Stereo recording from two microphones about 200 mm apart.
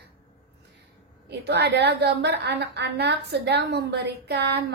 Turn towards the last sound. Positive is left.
turn(degrees=-55)  # may be behind; listen again after turning